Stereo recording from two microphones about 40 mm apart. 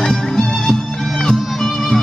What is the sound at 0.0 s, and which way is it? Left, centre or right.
Music, centre.